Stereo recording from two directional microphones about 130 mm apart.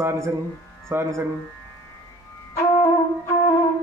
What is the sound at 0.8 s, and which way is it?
Speech, 20° right (ahead or behind).